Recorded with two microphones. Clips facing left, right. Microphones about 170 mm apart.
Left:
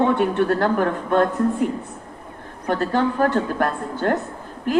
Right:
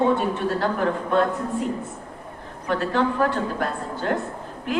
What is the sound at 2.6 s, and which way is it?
A woman's voice, 45° left (ahead or behind).